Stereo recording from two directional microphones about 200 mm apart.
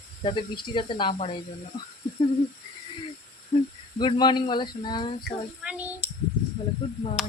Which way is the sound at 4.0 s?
20° left (ahead or behind).